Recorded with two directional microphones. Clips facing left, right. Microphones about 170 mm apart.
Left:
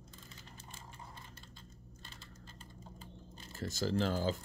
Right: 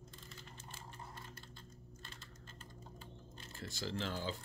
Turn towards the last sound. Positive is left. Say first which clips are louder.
# left 8 dB
turn(degrees=40)  # may be behind; listen again after turning